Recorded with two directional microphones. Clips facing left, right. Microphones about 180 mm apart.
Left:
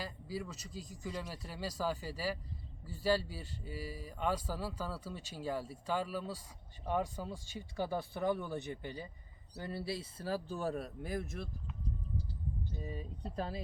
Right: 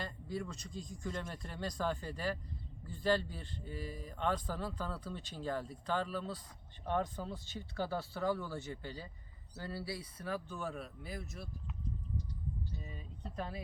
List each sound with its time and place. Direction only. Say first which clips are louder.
0.0 s speech: right 1 dB; 5° left (ahead or behind); by 11.4 s 55° left (ahead or behind)
12.8 s speech: left 5 dB; 35° left (ahead or behind)